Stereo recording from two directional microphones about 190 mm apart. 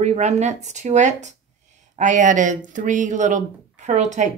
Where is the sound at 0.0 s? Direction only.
35° right (ahead or behind).